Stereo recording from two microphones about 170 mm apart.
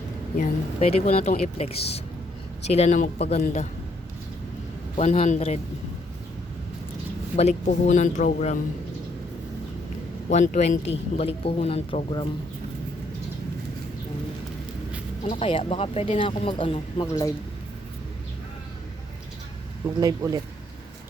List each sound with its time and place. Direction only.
0.3 s speech: 50° left (ahead or behind)
0.9 s speech: 40° left (ahead or behind)
4.9 s speech: 40° left (ahead or behind)
7.3 s speech: 45° left (ahead or behind)
10.2 s speech: 50° left (ahead or behind); by 12.3 s 30° left (ahead or behind)
15.2 s speech: 35° left (ahead or behind)
17.1 s speech: 20° left (ahead or behind)
20.0 s speech: 20° right (ahead or behind)